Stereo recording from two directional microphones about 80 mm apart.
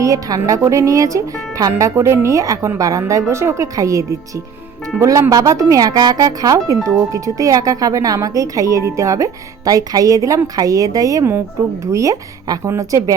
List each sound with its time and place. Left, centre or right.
0.0 s speech: right